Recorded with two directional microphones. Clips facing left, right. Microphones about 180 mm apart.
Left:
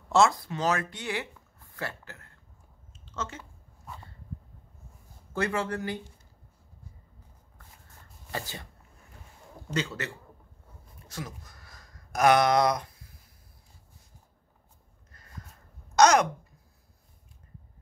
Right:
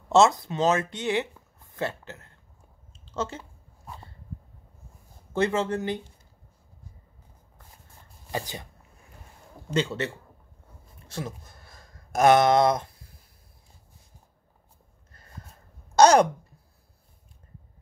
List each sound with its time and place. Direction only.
0.1 s speech: 25° right (ahead or behind)
5.3 s speech: 25° right (ahead or behind)
8.3 s speech: 15° right (ahead or behind)
9.8 s speech: 25° right (ahead or behind)
11.1 s a sound: 30° right (ahead or behind)
15.1 s a sound: 30° right (ahead or behind)
16.0 s speech: 30° right (ahead or behind)